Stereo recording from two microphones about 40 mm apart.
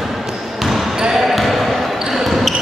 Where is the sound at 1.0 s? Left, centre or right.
Centre.